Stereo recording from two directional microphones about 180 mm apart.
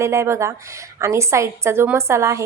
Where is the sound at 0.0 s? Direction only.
15° right (ahead or behind).